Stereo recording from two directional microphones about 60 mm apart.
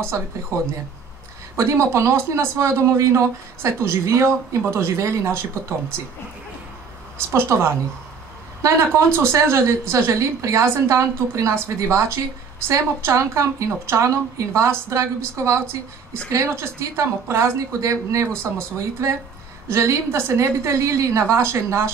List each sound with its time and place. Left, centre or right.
0.1 s a woman's voice: right
7.2 s a woman's voice: right